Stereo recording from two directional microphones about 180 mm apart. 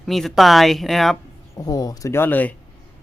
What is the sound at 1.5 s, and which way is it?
Speech, 20° left (ahead or behind).